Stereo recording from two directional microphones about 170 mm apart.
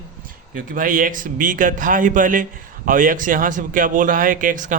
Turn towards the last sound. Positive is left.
turn(degrees=-50)  # may be behind; listen again after turning